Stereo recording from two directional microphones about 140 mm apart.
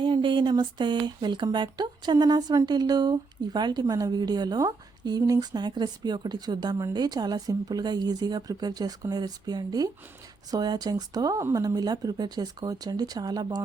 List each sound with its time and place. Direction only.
0.0 s speech: 35° right (ahead or behind)